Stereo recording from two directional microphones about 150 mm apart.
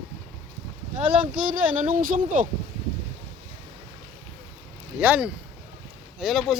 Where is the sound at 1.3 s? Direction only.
65° right (ahead or behind).